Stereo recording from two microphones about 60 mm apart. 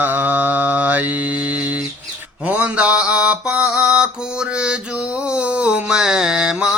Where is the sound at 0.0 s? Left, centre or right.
Right.